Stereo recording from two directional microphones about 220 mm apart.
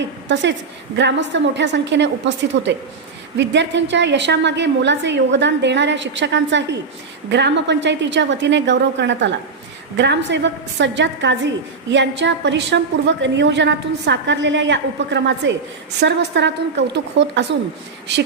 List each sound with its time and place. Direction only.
0.9 s a woman's voice: 55° right (ahead or behind)